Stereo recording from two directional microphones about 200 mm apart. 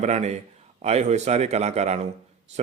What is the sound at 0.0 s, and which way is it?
A man's voice, 35° right (ahead or behind).